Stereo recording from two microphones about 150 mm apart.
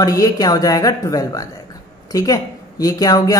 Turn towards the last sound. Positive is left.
turn(degrees=25)  # may be behind; listen again after turning